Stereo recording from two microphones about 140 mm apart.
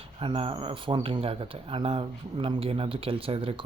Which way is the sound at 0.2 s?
40° right (ahead or behind).